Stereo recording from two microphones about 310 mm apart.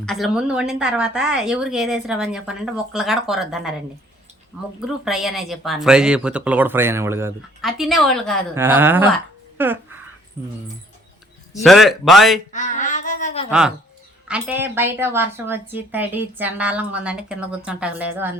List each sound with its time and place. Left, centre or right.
0.0 s speech: centre
4.9 s speech: centre
11.5 s speech: centre
12.5 s a sound: left
13.5 s a woman's voice: centre